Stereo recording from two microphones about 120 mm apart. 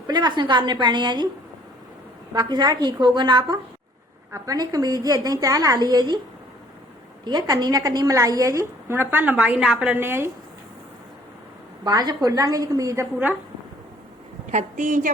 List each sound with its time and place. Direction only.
0.1 s a woman's voice: 40° right (ahead or behind)
2.3 s a woman's voice: 35° right (ahead or behind)
7.3 s a woman's voice: 35° right (ahead or behind)
11.9 s a woman's voice: 35° right (ahead or behind)
14.5 s a woman's voice: 90° right